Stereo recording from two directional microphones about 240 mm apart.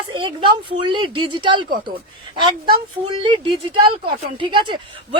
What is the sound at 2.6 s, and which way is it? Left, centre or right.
A woman's voice, centre.